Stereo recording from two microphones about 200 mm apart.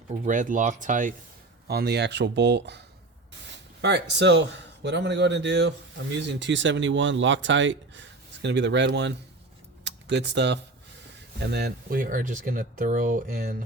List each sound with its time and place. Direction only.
0.1 s speech: 40° right (ahead or behind)
1.6 s speech: 55° right (ahead or behind)
9.8 s a sound: 60° right (ahead or behind)
11.3 s speech: 55° right (ahead or behind)